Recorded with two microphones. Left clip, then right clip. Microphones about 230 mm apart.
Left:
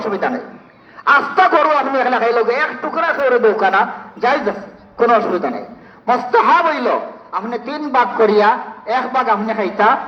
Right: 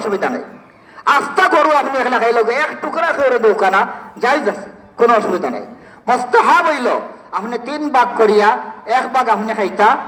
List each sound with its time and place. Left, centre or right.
0.0 s a man's voice: right